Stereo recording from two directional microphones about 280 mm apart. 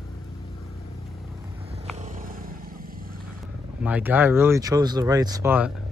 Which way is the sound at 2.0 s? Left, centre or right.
Right.